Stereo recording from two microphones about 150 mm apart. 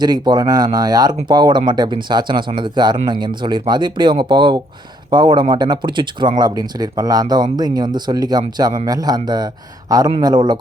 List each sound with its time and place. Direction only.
0.0 s speech: 30° right (ahead or behind)